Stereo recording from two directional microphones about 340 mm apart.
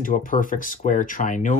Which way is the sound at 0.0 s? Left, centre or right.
Left.